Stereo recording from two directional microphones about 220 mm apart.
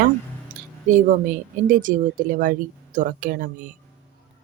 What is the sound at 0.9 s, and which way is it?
Speech, 35° right (ahead or behind).